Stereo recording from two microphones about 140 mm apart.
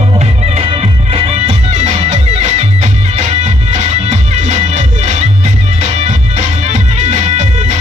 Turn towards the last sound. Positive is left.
turn(degrees=-55)  # may be behind; listen again after turning